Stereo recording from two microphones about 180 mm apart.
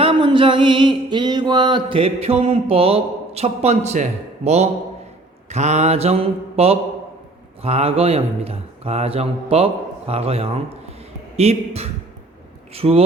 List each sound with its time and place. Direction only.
0.0 s music: 30° right (ahead or behind)